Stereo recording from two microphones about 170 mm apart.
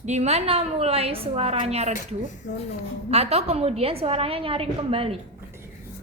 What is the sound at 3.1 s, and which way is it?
A woman's voice, 40° right (ahead or behind).